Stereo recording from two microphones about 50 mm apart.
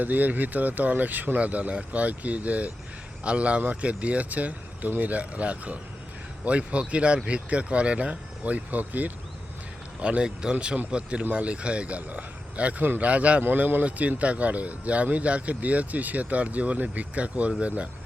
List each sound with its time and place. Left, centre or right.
0.0 s speech: right
10.0 s speech: right
12.8 s speech: right
13.1 s speech: right
13.4 s speech: right
13.8 s speech: right